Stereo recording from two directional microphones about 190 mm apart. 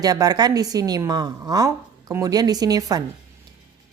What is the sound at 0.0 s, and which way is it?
Speech, 20° right (ahead or behind).